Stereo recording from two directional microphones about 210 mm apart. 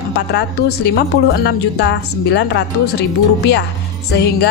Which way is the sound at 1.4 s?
55° left (ahead or behind).